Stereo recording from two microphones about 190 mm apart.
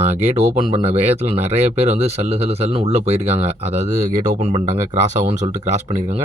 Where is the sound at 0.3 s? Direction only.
35° right (ahead or behind).